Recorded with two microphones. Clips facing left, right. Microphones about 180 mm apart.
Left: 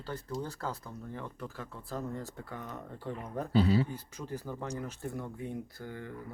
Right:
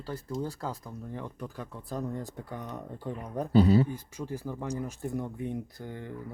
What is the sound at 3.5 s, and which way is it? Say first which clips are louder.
Speech: right 5 dB; 45° right (ahead or behind).